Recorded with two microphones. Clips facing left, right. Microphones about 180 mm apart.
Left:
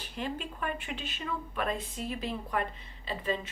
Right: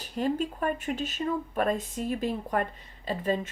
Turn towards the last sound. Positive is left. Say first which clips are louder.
# right 5 dB
turn(degrees=-45)  # may be behind; listen again after turning